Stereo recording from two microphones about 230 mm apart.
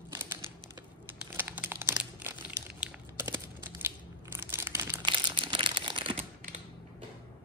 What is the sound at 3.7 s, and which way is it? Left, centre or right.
Crumpling, centre.